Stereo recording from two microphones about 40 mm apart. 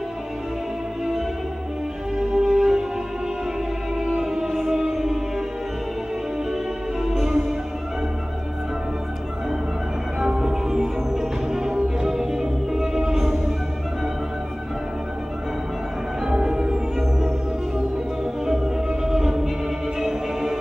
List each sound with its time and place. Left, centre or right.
2.1 s music: centre
4.0 s music: centre
7.1 s music: centre
10.2 s music: centre
16.3 s music: centre